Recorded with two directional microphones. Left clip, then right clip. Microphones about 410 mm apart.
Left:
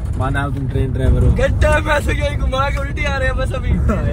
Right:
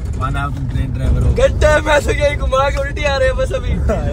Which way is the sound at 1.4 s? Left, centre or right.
Centre.